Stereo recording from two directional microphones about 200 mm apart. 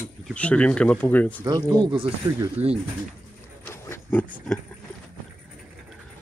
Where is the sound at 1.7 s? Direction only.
20° right (ahead or behind).